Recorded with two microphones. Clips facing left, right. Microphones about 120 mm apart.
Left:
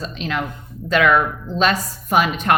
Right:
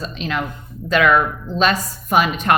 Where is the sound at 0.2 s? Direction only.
25° right (ahead or behind).